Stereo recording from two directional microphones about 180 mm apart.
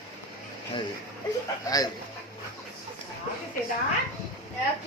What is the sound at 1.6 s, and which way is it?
Speech, 20° left (ahead or behind).